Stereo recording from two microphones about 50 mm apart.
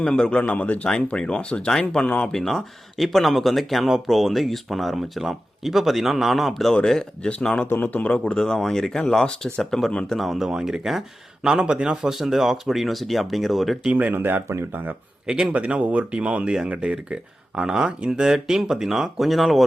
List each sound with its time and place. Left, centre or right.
0.0 s speech: left
1.0 s speech: centre
2.0 s a man's voice: left
2.3 s speech: centre
6.8 s speech: centre
7.4 s speech: left
7.7 s a man's voice: left
8.1 s speech: centre
10.2 s speech: centre
11.4 s speech: centre
13.9 s speech: right
15.3 s speech: centre